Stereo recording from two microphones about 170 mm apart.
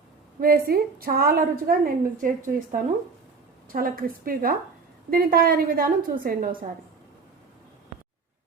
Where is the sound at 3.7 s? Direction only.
60° right (ahead or behind).